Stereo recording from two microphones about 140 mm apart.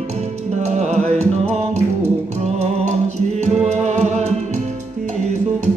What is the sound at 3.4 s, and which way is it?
Music, 55° right (ahead or behind).